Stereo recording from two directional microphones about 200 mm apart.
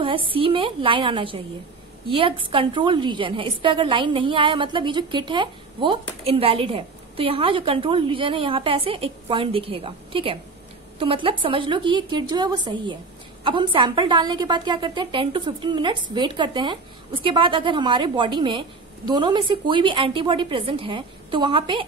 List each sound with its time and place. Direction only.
0.0 s a woman's voice: 25° right (ahead or behind)